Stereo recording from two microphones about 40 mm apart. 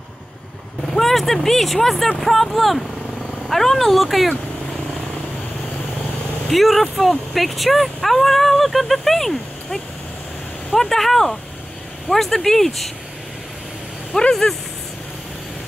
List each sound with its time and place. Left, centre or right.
0.9 s speech: centre
6.5 s speech: centre
14.1 s speech: left